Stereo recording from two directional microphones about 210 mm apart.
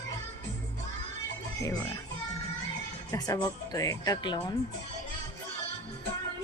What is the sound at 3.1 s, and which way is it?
Music, 15° left (ahead or behind).